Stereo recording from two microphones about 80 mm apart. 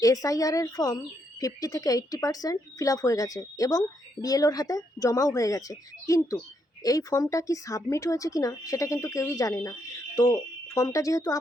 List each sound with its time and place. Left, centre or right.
0.0 s speech: left